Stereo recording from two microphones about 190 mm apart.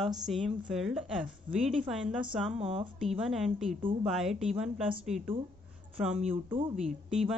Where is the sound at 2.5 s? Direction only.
30° right (ahead or behind).